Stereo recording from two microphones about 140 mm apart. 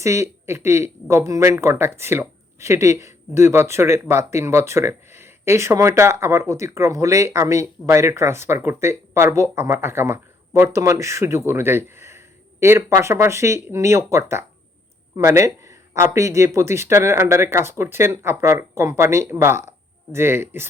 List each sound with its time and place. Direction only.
0.0 s speech: 20° right (ahead or behind)